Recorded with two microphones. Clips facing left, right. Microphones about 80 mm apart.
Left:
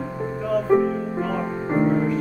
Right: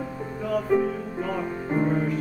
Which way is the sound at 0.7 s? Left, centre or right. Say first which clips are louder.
Left 4 dB; left.